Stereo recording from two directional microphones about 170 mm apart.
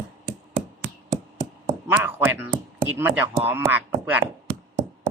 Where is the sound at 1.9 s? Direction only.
10° right (ahead or behind).